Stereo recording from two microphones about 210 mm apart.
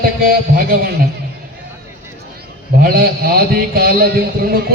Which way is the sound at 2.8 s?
45° right (ahead or behind).